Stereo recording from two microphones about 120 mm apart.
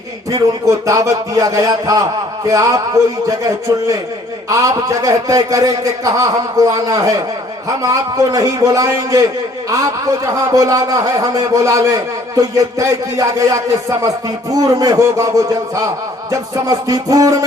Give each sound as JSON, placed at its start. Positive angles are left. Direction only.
{"t": 0.3, "sound": "a man's voice", "side_deg": -30}
{"t": 10.5, "sound": "a man's voice", "side_deg": -30}